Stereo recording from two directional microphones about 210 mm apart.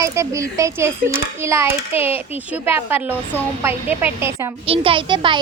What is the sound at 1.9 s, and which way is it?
Speech, 25° left (ahead or behind).